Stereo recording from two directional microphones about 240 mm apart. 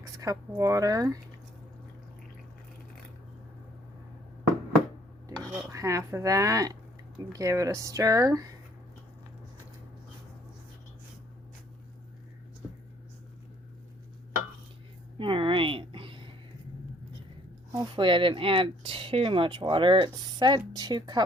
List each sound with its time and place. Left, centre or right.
0.0 s speech: centre
5.5 s speech: centre
15.2 s a sound: right
17.9 s speech: right